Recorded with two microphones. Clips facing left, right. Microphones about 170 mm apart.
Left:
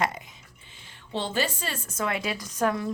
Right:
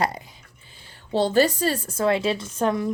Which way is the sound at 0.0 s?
35° right (ahead or behind).